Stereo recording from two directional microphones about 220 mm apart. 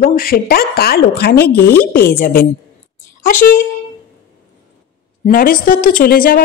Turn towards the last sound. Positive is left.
turn(degrees=40)  # may be behind; listen again after turning